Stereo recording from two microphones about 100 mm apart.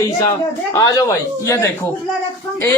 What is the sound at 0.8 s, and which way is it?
Speech, 35° left (ahead or behind).